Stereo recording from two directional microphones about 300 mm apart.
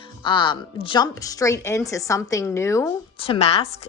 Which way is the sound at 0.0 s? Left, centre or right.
Centre.